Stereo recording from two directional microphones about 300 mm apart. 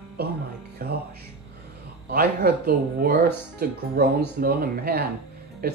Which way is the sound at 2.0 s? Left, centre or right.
Right.